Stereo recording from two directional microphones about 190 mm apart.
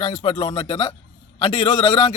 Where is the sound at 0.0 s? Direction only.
30° left (ahead or behind).